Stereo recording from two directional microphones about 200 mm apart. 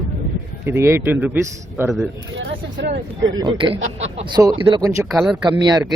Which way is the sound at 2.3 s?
60° right (ahead or behind).